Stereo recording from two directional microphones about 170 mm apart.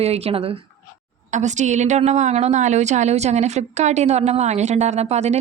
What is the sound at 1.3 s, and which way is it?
A woman's voice, 45° right (ahead or behind).